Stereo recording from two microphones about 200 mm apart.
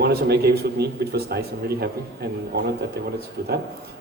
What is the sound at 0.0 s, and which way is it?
Speech, 50° right (ahead or behind).